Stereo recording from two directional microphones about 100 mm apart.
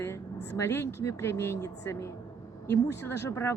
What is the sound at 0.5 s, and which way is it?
A woman's voice, 25° left (ahead or behind).